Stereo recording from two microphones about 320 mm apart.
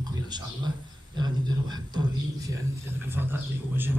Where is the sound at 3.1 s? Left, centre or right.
Centre.